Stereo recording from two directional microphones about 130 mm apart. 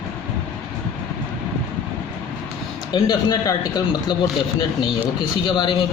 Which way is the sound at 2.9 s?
35° left (ahead or behind).